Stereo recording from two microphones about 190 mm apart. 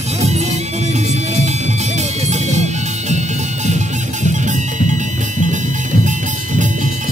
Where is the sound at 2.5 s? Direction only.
35° right (ahead or behind).